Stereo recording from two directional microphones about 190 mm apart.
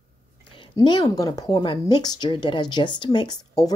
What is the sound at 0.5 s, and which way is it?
Speech, 25° left (ahead or behind).